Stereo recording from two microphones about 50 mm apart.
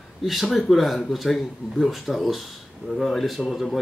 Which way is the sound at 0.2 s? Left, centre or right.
Centre.